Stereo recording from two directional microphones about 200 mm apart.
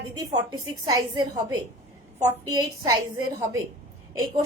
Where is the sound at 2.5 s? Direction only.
20° right (ahead or behind).